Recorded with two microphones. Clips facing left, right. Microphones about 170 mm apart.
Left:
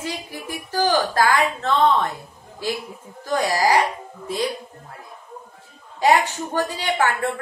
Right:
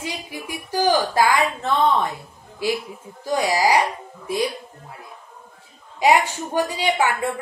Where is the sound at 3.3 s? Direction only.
15° right (ahead or behind).